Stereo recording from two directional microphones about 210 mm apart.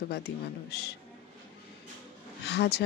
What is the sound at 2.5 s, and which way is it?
Speech, 50° left (ahead or behind).